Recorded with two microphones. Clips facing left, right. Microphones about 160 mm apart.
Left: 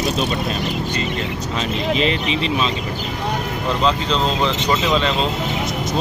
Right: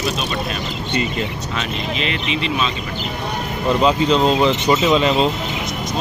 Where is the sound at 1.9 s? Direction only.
35° left (ahead or behind).